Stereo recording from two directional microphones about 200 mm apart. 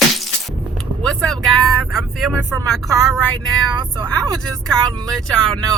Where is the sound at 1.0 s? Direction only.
5° left (ahead or behind).